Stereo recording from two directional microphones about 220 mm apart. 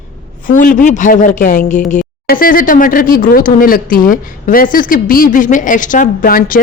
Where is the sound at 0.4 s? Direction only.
40° left (ahead or behind).